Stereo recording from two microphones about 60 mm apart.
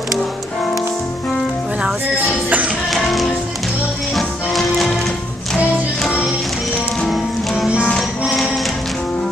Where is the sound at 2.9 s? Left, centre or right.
Centre.